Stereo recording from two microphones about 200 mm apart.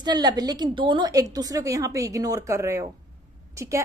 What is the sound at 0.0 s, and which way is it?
A woman's voice, 20° right (ahead or behind).